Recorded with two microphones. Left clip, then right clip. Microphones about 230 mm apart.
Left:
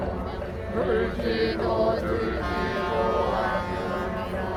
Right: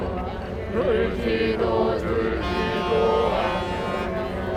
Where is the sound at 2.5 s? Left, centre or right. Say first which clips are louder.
Right 4 dB; right.